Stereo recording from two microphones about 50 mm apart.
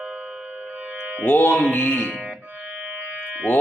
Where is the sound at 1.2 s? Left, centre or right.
Left.